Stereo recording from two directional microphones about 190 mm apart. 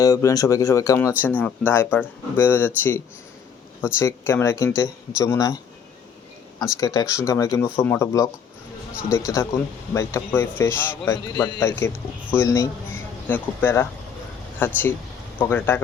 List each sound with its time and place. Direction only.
0.0 s a man's voice: 15° left (ahead or behind)
6.7 s a man's voice: 15° left (ahead or behind)